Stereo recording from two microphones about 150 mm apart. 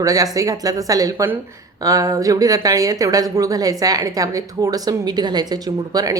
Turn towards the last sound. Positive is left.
turn(degrees=-25)  # may be behind; listen again after turning